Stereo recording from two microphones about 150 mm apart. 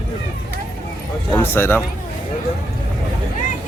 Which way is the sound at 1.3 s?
15° left (ahead or behind).